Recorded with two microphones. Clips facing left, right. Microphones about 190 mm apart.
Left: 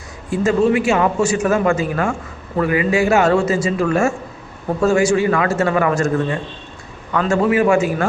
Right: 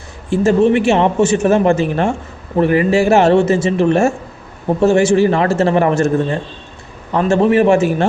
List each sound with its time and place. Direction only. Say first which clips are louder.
0.4 s a man's voice: right 3 dB; 25° right (ahead or behind)